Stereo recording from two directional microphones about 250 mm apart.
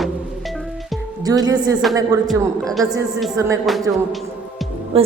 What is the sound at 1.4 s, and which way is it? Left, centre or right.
Speech, centre.